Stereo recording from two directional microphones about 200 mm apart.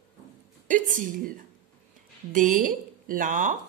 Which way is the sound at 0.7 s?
40° right (ahead or behind).